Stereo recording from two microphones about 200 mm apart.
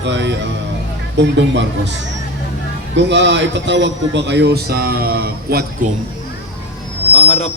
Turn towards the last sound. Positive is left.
turn(degrees=30)  # may be behind; listen again after turning